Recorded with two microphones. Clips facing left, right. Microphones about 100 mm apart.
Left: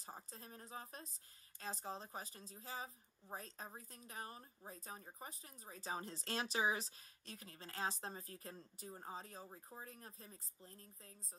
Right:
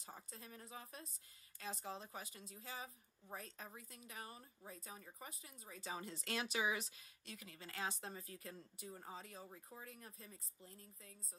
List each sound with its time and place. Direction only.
0.0 s a woman's voice: 35° left (ahead or behind)